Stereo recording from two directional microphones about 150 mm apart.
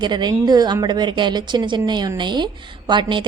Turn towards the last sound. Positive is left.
turn(degrees=-30)  # may be behind; listen again after turning